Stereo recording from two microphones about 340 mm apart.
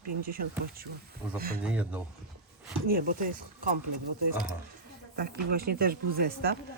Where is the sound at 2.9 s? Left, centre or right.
Right.